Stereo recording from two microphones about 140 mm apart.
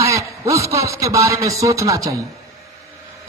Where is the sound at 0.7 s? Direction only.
20° right (ahead or behind).